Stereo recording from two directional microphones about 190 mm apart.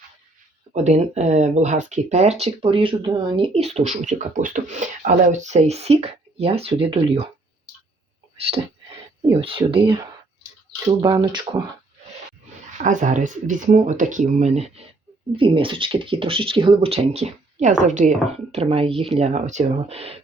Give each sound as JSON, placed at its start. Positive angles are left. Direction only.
{"t": 0.7, "sound": "speech", "side_deg": -35}
{"t": 9.4, "sound": "speech", "side_deg": -30}
{"t": 12.7, "sound": "speech", "side_deg": -40}